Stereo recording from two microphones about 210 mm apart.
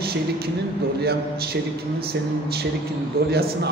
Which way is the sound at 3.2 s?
45° right (ahead or behind).